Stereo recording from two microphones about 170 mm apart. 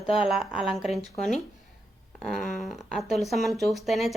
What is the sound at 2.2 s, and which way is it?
A woman's voice, centre (ahead or behind).